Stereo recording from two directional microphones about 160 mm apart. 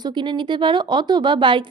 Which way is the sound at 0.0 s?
30° right (ahead or behind).